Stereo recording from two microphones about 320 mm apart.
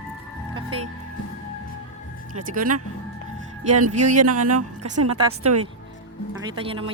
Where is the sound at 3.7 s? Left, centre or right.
Right.